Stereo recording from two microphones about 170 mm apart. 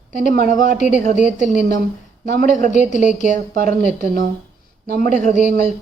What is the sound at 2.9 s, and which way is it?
Speech, 45° left (ahead or behind).